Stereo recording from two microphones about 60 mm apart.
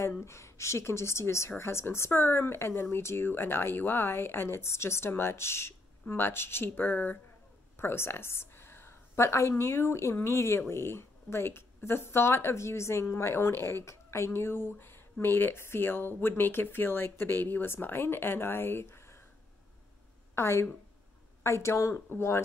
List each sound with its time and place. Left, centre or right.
0.2 s speech: left
7.7 s a sound: left
9.8 s speech: left
20.3 s a woman's voice: left